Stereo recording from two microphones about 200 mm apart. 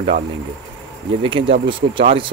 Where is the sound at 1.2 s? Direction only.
25° right (ahead or behind).